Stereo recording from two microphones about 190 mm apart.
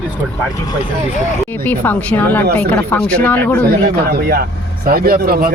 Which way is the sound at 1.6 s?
10° left (ahead or behind).